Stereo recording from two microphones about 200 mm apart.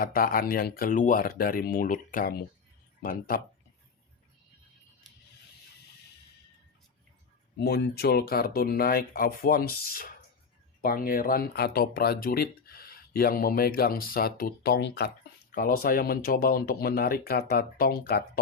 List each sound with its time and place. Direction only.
0.0 s speech: 45° left (ahead or behind)
7.6 s speech: 55° left (ahead or behind)
15.5 s speech: 45° left (ahead or behind)